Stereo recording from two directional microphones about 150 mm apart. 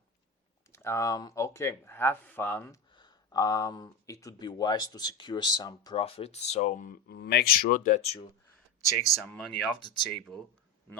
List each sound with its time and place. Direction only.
0.7 s speech: 15° left (ahead or behind)
2.9 s speech: 30° left (ahead or behind)
6.0 s speech: 40° left (ahead or behind); by 8.0 s 65° left (ahead or behind)
8.0 s speech: 40° left (ahead or behind)
9.1 s speech: 5° left (ahead or behind)